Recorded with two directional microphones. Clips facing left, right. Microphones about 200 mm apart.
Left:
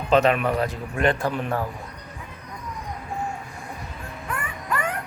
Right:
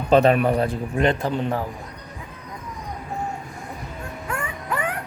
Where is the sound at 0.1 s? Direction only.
35° right (ahead or behind).